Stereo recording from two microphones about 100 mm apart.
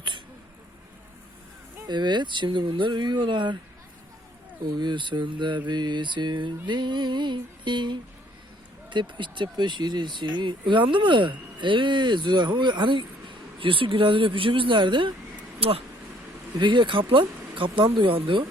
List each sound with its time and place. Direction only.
1.9 s speech: 50° right (ahead or behind)
4.8 s speech: 50° right (ahead or behind)
16.6 s speech: 55° right (ahead or behind)